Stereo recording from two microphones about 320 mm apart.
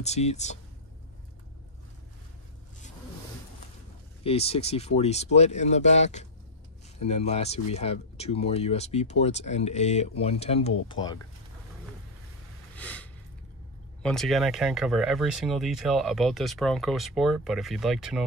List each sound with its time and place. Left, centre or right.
0.0 s speech: left
4.2 s speech: centre
12.7 s a sound: centre
14.0 s speech: centre